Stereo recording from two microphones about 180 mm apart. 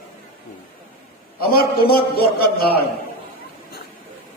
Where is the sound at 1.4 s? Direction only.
55° left (ahead or behind).